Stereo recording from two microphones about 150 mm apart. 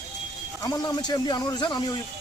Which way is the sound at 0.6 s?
25° left (ahead or behind).